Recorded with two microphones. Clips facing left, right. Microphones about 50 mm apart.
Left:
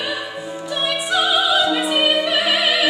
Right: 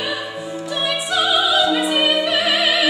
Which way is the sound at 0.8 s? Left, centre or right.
Centre.